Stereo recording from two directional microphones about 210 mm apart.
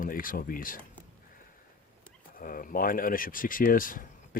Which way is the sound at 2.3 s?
40° left (ahead or behind).